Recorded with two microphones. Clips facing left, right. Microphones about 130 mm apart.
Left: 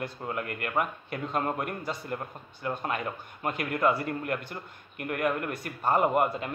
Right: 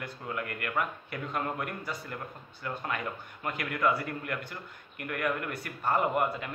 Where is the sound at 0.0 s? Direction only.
30° left (ahead or behind).